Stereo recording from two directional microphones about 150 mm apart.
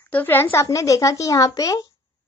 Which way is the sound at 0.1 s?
10° left (ahead or behind).